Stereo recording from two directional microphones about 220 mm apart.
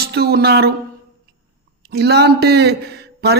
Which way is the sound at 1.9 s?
50° right (ahead or behind).